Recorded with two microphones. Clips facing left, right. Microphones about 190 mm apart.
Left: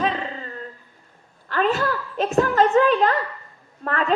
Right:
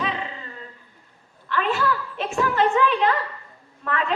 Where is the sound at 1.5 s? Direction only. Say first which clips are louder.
Left 2 dB; 40° left (ahead or behind).